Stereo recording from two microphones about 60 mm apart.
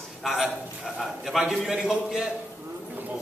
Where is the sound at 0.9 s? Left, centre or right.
Centre.